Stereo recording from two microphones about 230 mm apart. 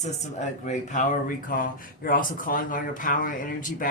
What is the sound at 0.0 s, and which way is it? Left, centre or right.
Speech, left.